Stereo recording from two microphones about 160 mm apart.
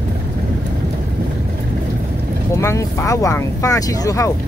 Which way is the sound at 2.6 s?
15° left (ahead or behind).